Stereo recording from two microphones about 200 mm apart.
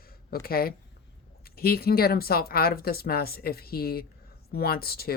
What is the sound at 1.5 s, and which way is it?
Speech, 50° left (ahead or behind).